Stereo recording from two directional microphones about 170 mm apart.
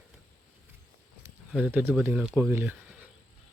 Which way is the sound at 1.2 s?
10° right (ahead or behind).